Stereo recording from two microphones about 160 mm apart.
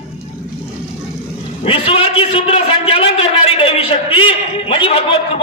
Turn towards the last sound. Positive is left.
turn(degrees=35)  # may be behind; listen again after turning